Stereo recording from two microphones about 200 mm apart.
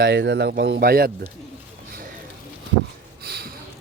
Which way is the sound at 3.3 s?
50° right (ahead or behind).